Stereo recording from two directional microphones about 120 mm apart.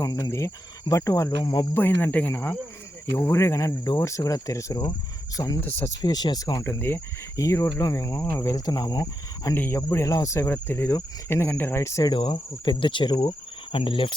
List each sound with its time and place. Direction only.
0.0 s cricket: 30° left (ahead or behind)
1.7 s speech: 15° left (ahead or behind)
3.2 s cricket: 20° left (ahead or behind)
6.0 s speech: 35° left (ahead or behind)
6.7 s cricket: 20° left (ahead or behind)
9.6 s cricket: 20° left (ahead or behind)
12.1 s cricket: 45° left (ahead or behind)